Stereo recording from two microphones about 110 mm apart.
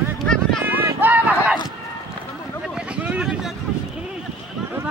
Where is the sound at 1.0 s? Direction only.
15° right (ahead or behind).